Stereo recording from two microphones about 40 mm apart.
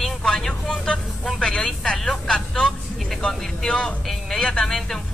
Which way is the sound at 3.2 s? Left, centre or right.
Centre.